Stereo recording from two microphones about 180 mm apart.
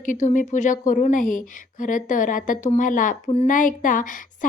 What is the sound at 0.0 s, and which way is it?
A woman's voice, 45° left (ahead or behind).